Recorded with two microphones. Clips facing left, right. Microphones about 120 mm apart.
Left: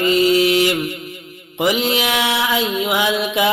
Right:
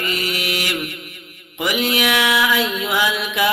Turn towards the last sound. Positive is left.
turn(degrees=25)  # may be behind; listen again after turning